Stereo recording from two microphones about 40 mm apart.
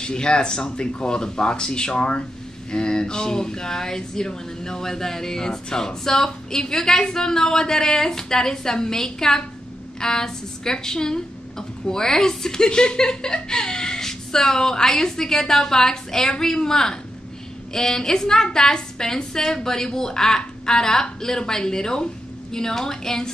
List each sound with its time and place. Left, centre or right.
0.0 s speech: left